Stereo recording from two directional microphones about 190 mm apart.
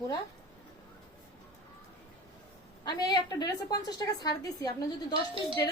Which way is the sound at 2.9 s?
20° left (ahead or behind).